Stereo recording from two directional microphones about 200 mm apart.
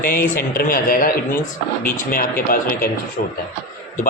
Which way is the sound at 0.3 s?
45° left (ahead or behind).